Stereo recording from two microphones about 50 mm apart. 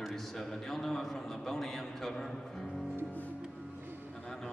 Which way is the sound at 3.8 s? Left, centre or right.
Right.